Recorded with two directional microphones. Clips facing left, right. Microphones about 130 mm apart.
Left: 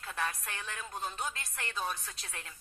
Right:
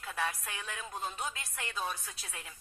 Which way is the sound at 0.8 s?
20° right (ahead or behind).